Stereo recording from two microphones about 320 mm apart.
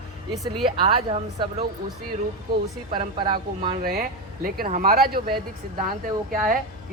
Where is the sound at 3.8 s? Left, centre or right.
Right.